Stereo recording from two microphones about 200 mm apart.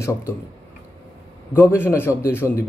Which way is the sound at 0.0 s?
15° left (ahead or behind).